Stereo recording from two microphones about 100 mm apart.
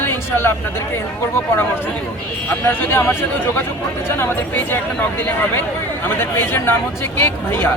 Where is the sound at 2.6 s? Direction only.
20° left (ahead or behind).